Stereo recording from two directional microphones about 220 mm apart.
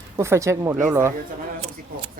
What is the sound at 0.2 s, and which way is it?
Speech, 15° right (ahead or behind).